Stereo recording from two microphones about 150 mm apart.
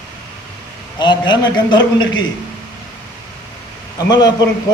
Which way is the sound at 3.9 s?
25° left (ahead or behind).